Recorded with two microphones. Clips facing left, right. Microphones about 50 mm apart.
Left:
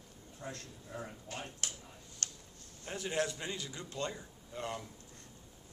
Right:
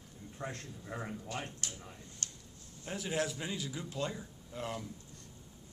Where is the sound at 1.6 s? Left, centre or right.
Left.